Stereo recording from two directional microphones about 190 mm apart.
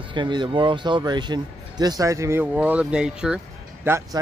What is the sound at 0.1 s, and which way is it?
Speech, 25° right (ahead or behind).